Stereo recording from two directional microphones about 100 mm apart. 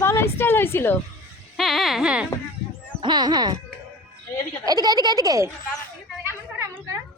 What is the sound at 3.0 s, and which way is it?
Speech, 50° right (ahead or behind).